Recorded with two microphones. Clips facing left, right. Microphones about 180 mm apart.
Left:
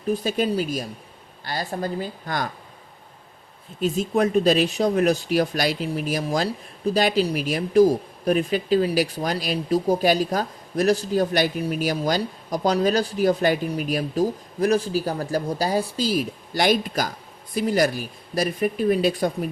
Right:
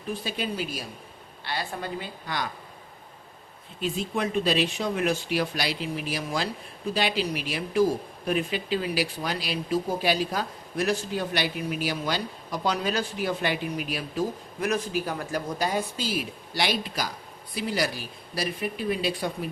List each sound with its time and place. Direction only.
0.1 s speech: 45° left (ahead or behind)
3.8 s speech: 45° left (ahead or behind)